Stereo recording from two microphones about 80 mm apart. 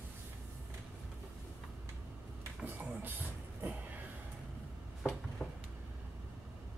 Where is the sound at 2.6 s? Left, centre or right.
Right.